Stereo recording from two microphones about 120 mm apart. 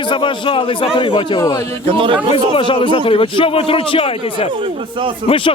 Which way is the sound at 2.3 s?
45° left (ahead or behind).